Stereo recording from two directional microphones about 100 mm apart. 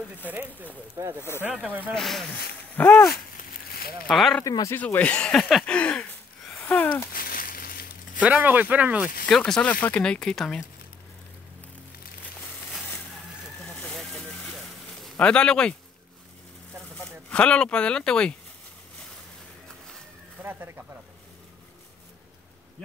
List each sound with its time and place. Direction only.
0.3 s speech: 15° right (ahead or behind)
1.4 s speech: 15° right (ahead or behind)
2.0 s speech: centre (ahead or behind)
2.7 s speech: 20° left (ahead or behind)
4.1 s speech: centre (ahead or behind)
4.5 s speech: 35° left (ahead or behind)
4.7 s speech: 15° left (ahead or behind)
6.6 s a sound: 15° left (ahead or behind)
8.2 s speech: 15° right (ahead or behind)
9.5 s speech: 15° left (ahead or behind)
13.8 s vehicle: centre (ahead or behind)
15.1 s speech: 10° left (ahead or behind)
17.3 s speech: 10° left (ahead or behind)
20.4 s speech: 20° right (ahead or behind)